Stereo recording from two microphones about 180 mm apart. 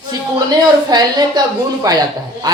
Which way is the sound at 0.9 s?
25° right (ahead or behind).